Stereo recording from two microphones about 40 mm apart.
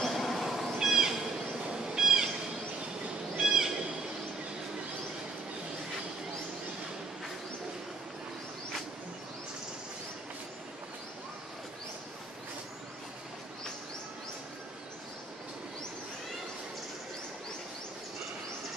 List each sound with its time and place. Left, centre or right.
0.1 s cat: centre
0.7 s a sound: centre
1.7 s cat: centre
3.3 s bird: centre